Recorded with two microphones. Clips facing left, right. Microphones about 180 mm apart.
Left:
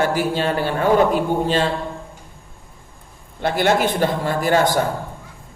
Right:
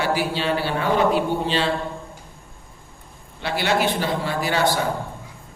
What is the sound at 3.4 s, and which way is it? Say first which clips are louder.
A man's voice: left 4 dB; 50° left (ahead or behind).